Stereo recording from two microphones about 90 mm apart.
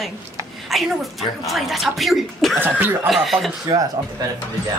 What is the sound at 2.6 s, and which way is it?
Speech, 20° right (ahead or behind).